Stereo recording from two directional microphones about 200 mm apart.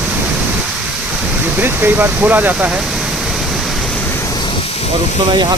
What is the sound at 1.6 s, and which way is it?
Speech, 10° right (ahead or behind).